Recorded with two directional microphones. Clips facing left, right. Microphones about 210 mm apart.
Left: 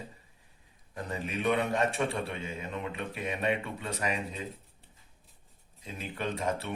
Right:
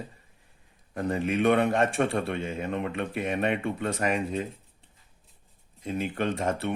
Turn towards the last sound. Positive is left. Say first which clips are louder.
# right 5 dB
turn(degrees=-50)  # may be behind; listen again after turning